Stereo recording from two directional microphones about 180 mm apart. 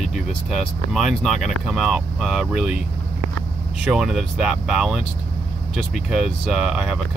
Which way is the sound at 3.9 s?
Centre (ahead or behind).